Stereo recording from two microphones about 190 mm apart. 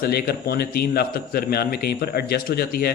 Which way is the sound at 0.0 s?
55° left (ahead or behind).